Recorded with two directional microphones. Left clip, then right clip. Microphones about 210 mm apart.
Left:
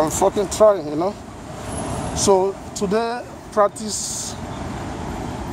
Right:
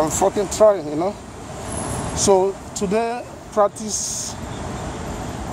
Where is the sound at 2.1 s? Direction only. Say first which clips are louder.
Even; 5° right (ahead or behind).